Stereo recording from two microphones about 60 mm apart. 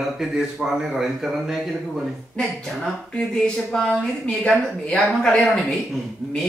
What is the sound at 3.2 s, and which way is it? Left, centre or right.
A woman's voice, centre.